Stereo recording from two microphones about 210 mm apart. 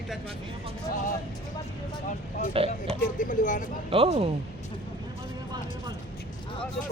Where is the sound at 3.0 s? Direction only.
40° left (ahead or behind).